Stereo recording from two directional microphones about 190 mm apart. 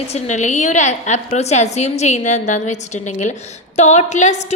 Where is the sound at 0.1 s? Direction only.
40° left (ahead or behind).